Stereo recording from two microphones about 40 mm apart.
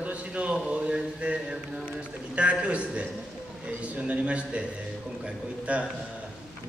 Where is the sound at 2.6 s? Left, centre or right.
Right.